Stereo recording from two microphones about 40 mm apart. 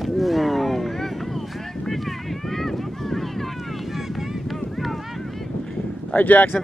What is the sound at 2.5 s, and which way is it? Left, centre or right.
Boat, centre.